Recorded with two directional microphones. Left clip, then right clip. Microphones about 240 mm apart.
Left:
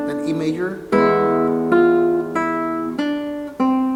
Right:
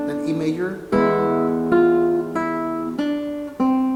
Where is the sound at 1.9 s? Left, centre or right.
Centre.